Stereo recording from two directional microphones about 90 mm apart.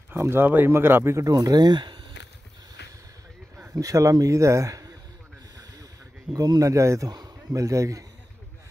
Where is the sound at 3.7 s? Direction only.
35° right (ahead or behind).